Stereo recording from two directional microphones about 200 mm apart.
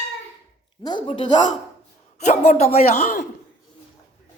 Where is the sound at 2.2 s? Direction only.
35° left (ahead or behind).